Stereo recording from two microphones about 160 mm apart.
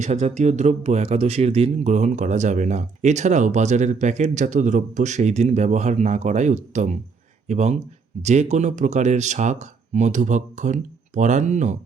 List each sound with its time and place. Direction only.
0.0 s speech: 45° right (ahead or behind)